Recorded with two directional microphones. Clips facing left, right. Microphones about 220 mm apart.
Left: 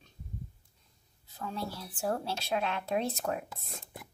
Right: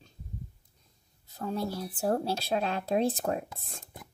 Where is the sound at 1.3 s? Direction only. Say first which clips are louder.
Right 6 dB; 40° right (ahead or behind).